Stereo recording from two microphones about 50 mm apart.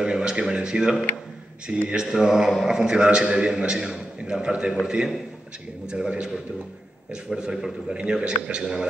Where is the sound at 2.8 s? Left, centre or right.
Centre.